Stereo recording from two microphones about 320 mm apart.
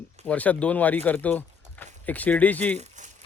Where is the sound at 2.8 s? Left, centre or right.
Right.